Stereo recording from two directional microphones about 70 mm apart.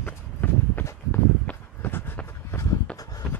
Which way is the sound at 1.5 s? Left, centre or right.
Left.